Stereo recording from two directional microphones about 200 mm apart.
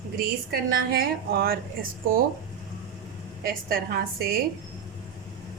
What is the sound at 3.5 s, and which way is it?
Speech, 50° right (ahead or behind).